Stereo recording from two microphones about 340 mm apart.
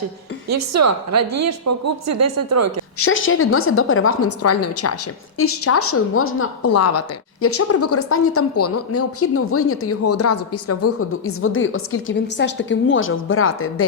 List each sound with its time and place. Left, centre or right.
0.4 s speech: right
3.0 s speech: left